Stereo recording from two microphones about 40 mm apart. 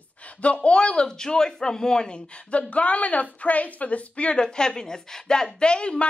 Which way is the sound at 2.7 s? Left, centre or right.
Left.